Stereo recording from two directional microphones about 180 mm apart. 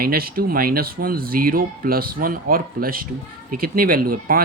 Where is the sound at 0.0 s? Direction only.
55° right (ahead or behind).